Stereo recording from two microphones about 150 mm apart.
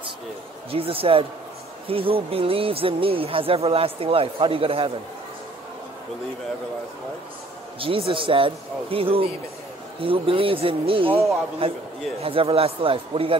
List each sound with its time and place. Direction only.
0.7 s speech: 40° right (ahead or behind)
7.8 s speech: 35° right (ahead or behind)